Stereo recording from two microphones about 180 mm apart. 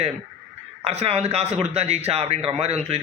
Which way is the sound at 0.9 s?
35° right (ahead or behind).